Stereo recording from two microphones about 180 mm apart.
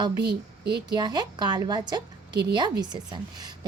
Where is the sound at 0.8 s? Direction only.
25° right (ahead or behind).